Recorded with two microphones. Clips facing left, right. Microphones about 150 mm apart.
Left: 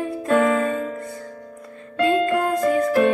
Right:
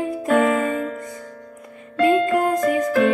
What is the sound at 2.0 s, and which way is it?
Music, 15° right (ahead or behind).